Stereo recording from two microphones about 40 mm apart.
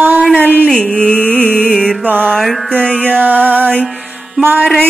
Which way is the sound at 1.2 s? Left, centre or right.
Left.